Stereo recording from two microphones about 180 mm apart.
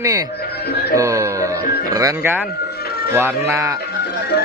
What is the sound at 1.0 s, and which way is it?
Music, 15° right (ahead or behind).